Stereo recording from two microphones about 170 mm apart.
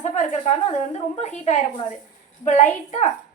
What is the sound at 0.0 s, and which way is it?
A woman's voice, 45° left (ahead or behind).